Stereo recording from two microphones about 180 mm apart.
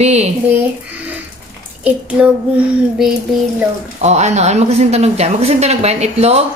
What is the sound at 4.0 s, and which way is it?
Speech, 40° right (ahead or behind).